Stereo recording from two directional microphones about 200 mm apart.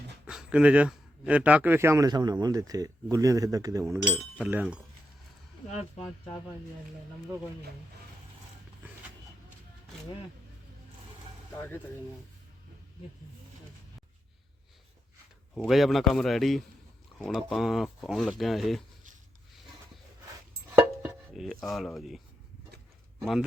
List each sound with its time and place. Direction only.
0.3 s speech: 5° right (ahead or behind)
4.4 s speech: centre (ahead or behind)
5.6 s speech: 35° left (ahead or behind)
15.5 s speech: centre (ahead or behind)
20.7 s chopping: 5° right (ahead or behind)